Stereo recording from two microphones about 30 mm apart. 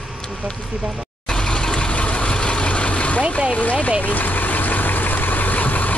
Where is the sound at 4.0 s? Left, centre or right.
Left.